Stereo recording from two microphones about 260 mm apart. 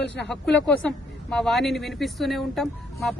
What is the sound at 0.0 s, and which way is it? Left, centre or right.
Speech, left.